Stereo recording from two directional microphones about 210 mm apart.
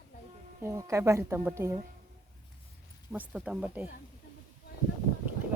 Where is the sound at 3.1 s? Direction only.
5° right (ahead or behind).